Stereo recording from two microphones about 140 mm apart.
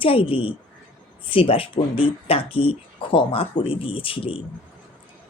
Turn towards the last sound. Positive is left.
turn(degrees=40)  # may be behind; listen again after turning